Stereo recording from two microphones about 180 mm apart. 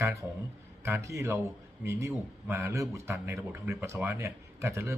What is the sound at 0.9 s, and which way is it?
Speech, 15° right (ahead or behind).